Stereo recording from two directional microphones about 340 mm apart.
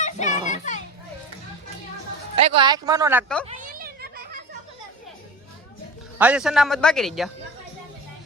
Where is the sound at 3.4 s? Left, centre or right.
Right.